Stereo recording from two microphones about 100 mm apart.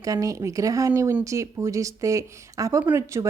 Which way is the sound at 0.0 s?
35° right (ahead or behind).